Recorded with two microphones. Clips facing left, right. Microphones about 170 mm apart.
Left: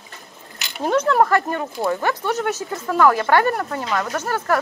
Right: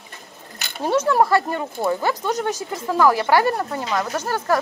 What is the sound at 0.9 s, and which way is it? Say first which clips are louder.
Speech: even; 10° right (ahead or behind).